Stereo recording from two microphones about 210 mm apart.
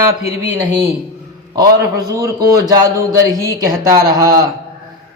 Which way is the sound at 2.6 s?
15° right (ahead or behind).